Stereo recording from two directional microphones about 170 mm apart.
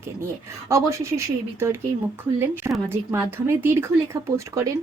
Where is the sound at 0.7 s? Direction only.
15° right (ahead or behind).